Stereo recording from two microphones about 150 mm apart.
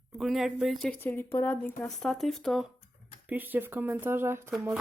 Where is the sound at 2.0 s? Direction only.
Centre (ahead or behind).